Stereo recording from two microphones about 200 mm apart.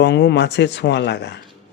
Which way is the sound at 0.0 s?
60° left (ahead or behind).